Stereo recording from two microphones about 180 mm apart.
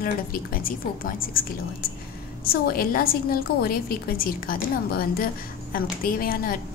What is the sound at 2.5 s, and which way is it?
A woman's voice, 55° left (ahead or behind).